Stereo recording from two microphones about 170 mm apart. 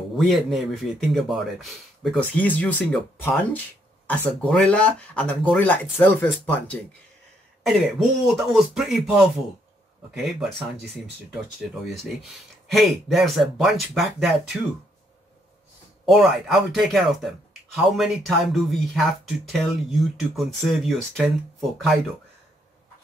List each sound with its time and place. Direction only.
0.2 s speech: centre (ahead or behind)
7.6 s speech: centre (ahead or behind)
12.6 s speech: centre (ahead or behind)
16.1 s speech: centre (ahead or behind)